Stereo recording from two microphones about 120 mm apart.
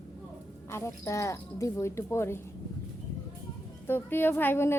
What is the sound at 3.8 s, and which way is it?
Speech, 20° left (ahead or behind).